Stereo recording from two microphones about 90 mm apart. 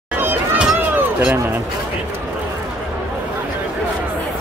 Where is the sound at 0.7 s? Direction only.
25° right (ahead or behind).